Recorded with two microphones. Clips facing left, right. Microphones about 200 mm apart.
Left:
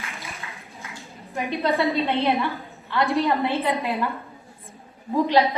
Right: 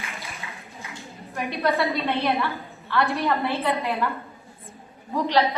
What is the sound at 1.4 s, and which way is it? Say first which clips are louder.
A woman's voice: left 1 dB; 15° left (ahead or behind).